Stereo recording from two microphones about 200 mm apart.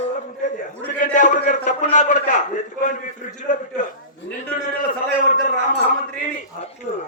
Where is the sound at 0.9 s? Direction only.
40° left (ahead or behind).